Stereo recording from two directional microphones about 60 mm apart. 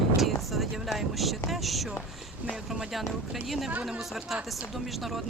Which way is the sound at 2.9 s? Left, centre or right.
Centre.